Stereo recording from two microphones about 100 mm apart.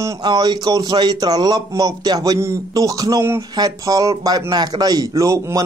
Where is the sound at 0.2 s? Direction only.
45° right (ahead or behind).